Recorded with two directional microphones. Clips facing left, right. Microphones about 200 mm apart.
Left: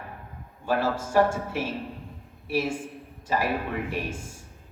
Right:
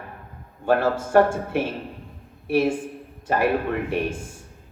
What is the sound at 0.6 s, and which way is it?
Speech, 55° right (ahead or behind).